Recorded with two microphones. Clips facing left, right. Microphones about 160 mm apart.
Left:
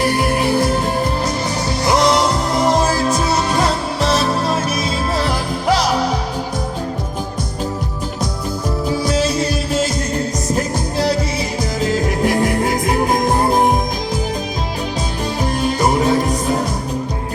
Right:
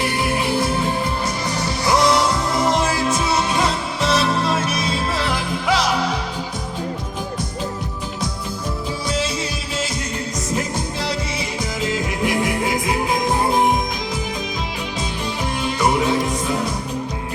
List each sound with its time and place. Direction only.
0.0 s music: 45° left (ahead or behind)
1.8 s music: 30° left (ahead or behind)
9.0 s music: 45° left (ahead or behind)
11.8 s music: 40° left (ahead or behind)
15.6 s music: 40° left (ahead or behind)